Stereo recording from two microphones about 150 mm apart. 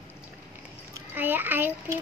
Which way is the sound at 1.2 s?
10° right (ahead or behind).